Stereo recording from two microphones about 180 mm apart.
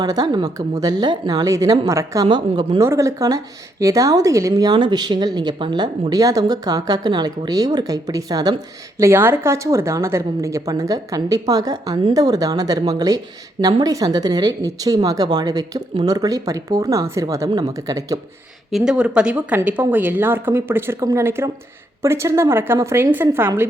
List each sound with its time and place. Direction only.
0.0 s a woman's voice: 20° right (ahead or behind)
18.7 s speech: 5° right (ahead or behind)